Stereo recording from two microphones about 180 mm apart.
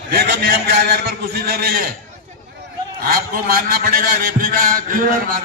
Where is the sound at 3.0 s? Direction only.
55° right (ahead or behind).